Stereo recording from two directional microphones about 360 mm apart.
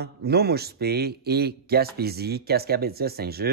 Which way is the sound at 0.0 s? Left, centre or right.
Right.